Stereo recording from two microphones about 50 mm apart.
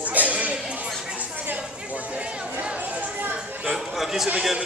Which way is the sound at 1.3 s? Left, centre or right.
Right.